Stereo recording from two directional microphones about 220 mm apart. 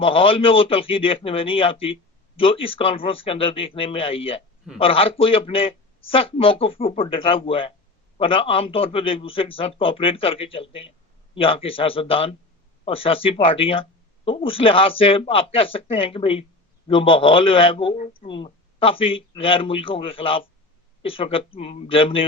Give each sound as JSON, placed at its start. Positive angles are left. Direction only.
{"t": 0.0, "sound": "speech", "side_deg": 25}